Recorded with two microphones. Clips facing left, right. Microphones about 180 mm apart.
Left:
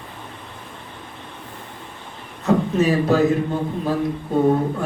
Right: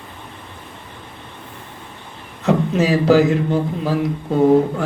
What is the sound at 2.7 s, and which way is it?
A man's voice, 90° right.